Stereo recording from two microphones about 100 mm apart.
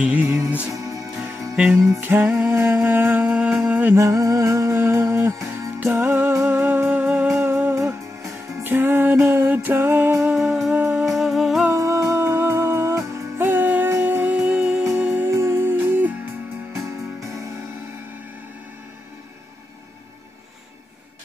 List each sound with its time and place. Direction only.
0.0 s music: 15° right (ahead or behind)
0.8 s music: 35° right (ahead or behind)
1.7 s music: 20° right (ahead or behind)
3.9 s music: 30° right (ahead or behind)
8.6 s music: 20° right (ahead or behind)
10.3 s music: 5° right (ahead or behind)
11.7 s music: 30° right (ahead or behind)
16.7 s music: 30° right (ahead or behind)